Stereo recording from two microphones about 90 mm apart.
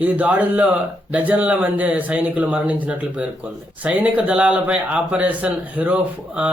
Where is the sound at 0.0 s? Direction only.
15° right (ahead or behind).